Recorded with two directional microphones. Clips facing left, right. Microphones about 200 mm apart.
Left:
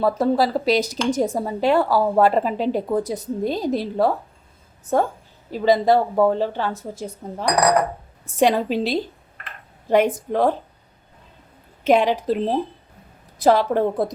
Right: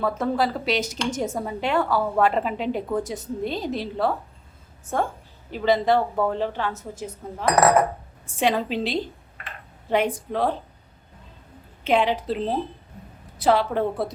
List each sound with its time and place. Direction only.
0.0 s a woman's voice: 35° left (ahead or behind)
5.5 s a woman's voice: 40° left (ahead or behind)
7.4 s cutlery: centre (ahead or behind)
8.4 s a woman's voice: 40° left (ahead or behind)
11.8 s a woman's voice: 45° left (ahead or behind)